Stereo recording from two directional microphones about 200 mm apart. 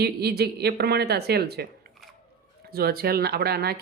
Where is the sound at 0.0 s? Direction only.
55° right (ahead or behind).